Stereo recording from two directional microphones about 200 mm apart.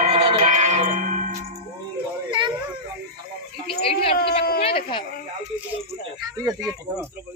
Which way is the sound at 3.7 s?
30° left (ahead or behind).